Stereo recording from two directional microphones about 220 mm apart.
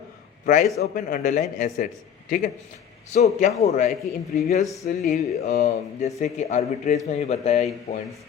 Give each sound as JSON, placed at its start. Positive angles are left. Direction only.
{"t": 0.4, "sound": "speech", "side_deg": 35}
{"t": 3.1, "sound": "speech", "side_deg": 30}
{"t": 4.4, "sound": "speech", "side_deg": 40}